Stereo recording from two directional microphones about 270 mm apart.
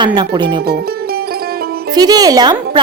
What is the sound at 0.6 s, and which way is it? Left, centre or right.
Speech, right.